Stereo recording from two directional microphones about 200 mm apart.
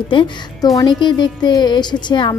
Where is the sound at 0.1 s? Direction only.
20° left (ahead or behind).